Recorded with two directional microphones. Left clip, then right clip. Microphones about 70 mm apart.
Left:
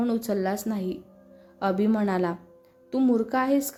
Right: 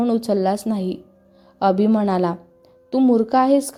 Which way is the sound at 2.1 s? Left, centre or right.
Right.